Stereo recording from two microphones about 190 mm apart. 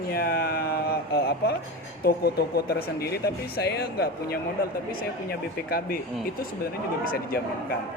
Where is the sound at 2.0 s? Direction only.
55° left (ahead or behind).